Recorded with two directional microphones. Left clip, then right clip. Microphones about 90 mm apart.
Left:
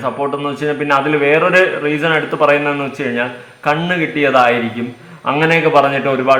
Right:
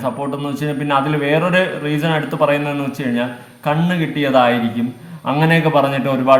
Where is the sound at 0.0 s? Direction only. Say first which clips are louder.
Left 4 dB; 25° right (ahead or behind).